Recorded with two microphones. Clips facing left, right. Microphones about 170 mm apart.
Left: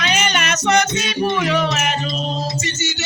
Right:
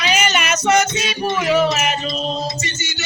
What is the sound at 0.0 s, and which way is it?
Music, 5° right (ahead or behind).